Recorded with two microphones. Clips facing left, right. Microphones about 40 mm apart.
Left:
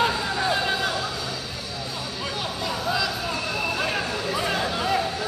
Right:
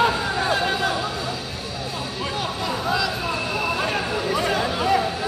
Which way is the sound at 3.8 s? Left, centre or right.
Centre.